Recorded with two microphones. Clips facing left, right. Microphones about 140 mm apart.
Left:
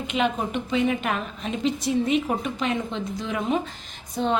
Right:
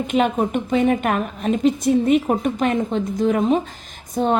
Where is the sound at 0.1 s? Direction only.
45° right (ahead or behind).